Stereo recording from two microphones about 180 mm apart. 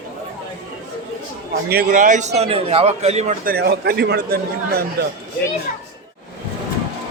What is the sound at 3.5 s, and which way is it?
A man's voice, 60° right (ahead or behind).